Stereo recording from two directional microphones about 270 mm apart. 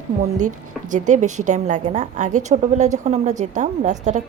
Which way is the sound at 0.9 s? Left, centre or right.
Right.